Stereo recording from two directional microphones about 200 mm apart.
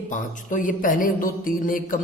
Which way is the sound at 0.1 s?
40° left (ahead or behind).